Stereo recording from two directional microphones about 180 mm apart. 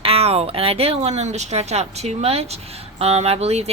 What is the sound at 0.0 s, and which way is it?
Speech, 35° right (ahead or behind).